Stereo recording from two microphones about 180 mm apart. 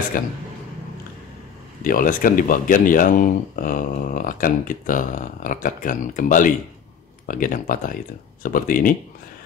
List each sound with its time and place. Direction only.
1.8 s speech: 50° left (ahead or behind)